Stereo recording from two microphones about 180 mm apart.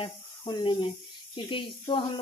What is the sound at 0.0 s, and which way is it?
Speech, 25° left (ahead or behind).